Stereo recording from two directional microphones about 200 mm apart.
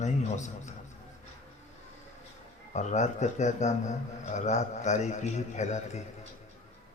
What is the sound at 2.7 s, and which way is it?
A man's voice, 35° left (ahead or behind).